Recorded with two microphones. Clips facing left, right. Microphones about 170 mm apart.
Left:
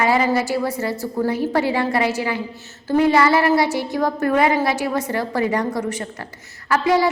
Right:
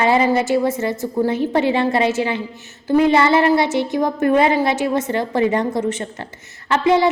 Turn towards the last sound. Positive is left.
turn(degrees=-25)  # may be behind; listen again after turning